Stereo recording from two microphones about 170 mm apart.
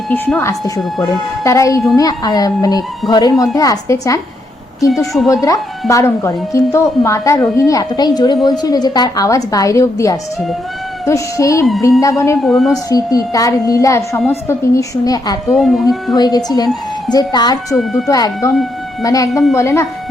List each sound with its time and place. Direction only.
0.1 s a woman's voice: 10° left (ahead or behind)
5.1 s speech: centre (ahead or behind)
5.9 s a woman's voice: 20° left (ahead or behind)
12.4 s speech: centre (ahead or behind)
12.9 s a woman's voice: 20° left (ahead or behind)
15.5 s speech: centre (ahead or behind)
16.1 s a woman's voice: 25° left (ahead or behind)
17.7 s speech: centre (ahead or behind)
18.1 s a woman's voice: 20° left (ahead or behind)
19.3 s speech: centre (ahead or behind)
19.5 s a woman's voice: 15° left (ahead or behind)